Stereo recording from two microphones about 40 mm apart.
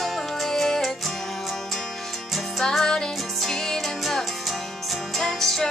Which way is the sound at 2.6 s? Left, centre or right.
Centre.